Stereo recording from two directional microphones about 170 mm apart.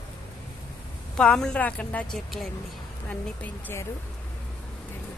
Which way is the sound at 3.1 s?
10° left (ahead or behind).